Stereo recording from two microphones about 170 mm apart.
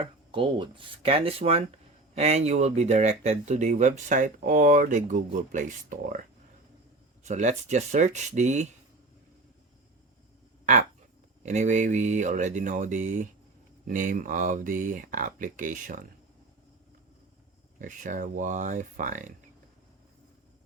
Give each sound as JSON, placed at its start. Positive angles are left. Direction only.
{"t": 0.0, "sound": "speech", "side_deg": -30}
{"t": 7.3, "sound": "speech", "side_deg": -45}
{"t": 11.4, "sound": "speech", "side_deg": -45}
{"t": 17.7, "sound": "speech", "side_deg": -50}